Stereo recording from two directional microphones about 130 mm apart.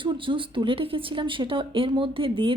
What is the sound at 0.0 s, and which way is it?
A woman's voice, 40° right (ahead or behind).